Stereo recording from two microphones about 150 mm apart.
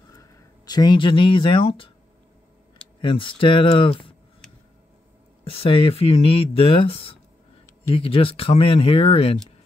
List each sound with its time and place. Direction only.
0.1 s speech: 25° left (ahead or behind)
3.0 s speech: 35° left (ahead or behind)
5.4 s speech: 35° left (ahead or behind)